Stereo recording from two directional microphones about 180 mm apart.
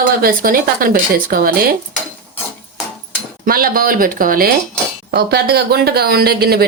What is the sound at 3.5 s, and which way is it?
A woman's voice, 55° right (ahead or behind).